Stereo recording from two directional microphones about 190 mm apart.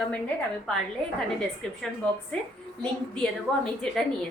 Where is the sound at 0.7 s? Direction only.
5° left (ahead or behind).